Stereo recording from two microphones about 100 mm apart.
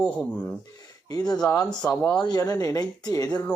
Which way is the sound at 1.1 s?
40° left (ahead or behind).